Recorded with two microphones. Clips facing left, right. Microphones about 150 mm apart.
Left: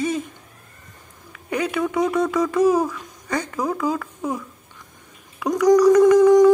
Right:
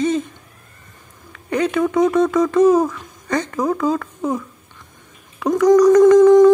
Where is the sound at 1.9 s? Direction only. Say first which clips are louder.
Right 5 dB; 10° left (ahead or behind).